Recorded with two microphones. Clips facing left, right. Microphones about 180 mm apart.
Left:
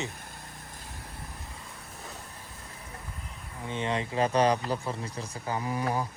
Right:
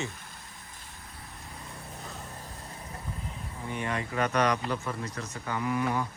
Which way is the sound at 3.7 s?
20° left (ahead or behind).